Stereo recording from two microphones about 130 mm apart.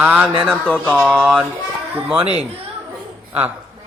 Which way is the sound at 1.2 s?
Centre (ahead or behind).